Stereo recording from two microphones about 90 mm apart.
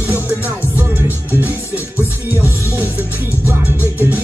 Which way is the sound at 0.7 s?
20° right (ahead or behind).